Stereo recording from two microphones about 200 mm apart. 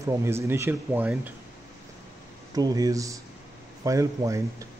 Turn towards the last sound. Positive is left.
turn(degrees=-15)  # may be behind; listen again after turning